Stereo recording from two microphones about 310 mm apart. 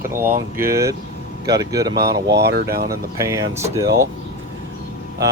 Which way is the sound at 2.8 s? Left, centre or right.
Centre.